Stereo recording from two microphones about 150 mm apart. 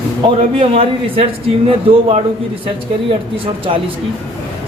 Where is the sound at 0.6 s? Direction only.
40° right (ahead or behind).